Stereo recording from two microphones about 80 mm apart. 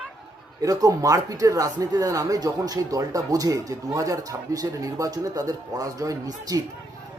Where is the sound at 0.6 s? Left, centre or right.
Right.